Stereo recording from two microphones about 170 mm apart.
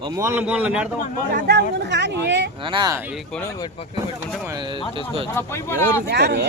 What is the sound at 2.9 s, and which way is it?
Speech, 5° right (ahead or behind).